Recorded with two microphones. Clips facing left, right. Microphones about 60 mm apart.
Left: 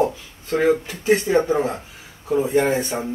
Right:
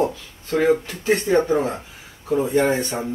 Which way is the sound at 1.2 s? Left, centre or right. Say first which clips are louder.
Even; centre.